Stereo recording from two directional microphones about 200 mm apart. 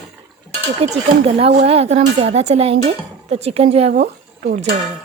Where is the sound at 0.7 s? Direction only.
30° right (ahead or behind).